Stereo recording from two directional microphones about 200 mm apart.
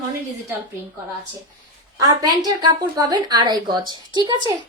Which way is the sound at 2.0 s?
20° right (ahead or behind).